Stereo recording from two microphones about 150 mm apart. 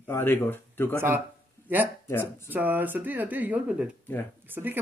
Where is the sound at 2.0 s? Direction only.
20° left (ahead or behind).